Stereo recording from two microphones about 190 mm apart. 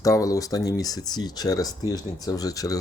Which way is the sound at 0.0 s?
20° left (ahead or behind).